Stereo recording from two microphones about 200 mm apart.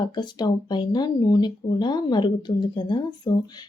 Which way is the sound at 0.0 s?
20° left (ahead or behind).